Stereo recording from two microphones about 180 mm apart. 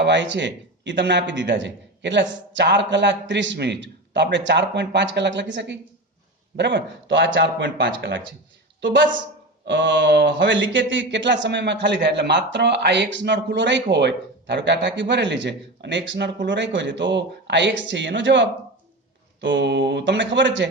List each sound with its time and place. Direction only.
0.0 s a man's voice: 80° right